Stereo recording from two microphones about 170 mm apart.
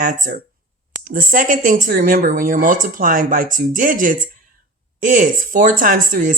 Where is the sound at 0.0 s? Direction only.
50° right (ahead or behind).